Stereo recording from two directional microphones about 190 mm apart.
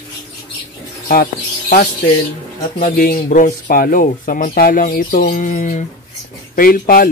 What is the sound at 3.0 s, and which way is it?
Speech, 45° left (ahead or behind).